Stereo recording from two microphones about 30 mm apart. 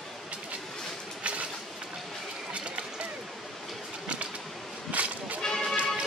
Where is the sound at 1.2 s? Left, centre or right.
Right.